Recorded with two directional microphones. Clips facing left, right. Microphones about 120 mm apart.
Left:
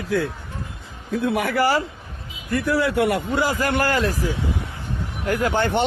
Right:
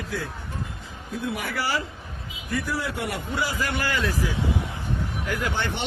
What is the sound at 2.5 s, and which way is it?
A man's voice, 60° left (ahead or behind).